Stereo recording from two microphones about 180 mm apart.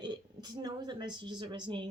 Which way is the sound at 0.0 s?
25° right (ahead or behind).